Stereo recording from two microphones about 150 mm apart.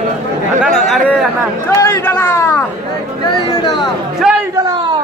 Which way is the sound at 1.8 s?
15° left (ahead or behind).